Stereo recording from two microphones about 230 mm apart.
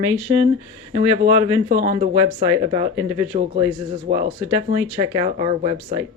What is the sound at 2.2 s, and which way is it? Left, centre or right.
Speech, centre.